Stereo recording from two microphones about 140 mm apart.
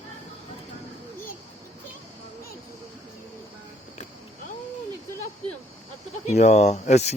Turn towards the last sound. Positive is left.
turn(degrees=50)  # may be behind; listen again after turning